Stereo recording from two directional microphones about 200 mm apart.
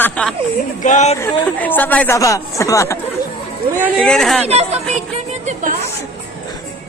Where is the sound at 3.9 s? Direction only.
5° left (ahead or behind).